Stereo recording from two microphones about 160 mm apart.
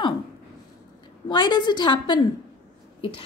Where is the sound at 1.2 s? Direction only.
30° left (ahead or behind).